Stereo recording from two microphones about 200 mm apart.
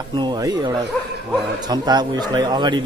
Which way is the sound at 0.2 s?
20° right (ahead or behind).